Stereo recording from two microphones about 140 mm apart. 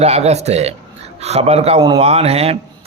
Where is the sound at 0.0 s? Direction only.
50° right (ahead or behind).